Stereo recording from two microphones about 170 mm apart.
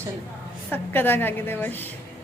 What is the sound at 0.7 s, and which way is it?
Speech, 10° left (ahead or behind).